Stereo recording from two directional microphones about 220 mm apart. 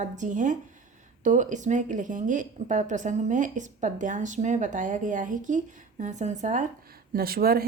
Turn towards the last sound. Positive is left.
turn(degrees=-40)  # may be behind; listen again after turning